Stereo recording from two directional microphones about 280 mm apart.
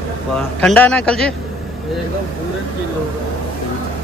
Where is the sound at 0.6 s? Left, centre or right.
Centre.